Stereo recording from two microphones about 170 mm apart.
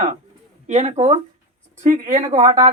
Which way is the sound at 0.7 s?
40° right (ahead or behind).